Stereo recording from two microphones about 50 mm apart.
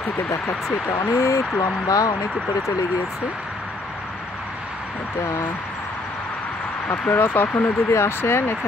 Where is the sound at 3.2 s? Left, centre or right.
Centre.